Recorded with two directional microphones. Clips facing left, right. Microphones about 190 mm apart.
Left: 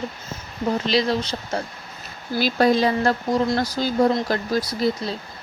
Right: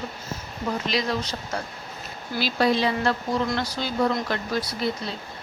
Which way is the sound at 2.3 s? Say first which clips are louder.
Left 4 dB; 45° left (ahead or behind).